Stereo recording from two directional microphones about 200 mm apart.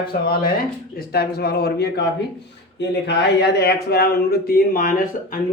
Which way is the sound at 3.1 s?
55° left (ahead or behind).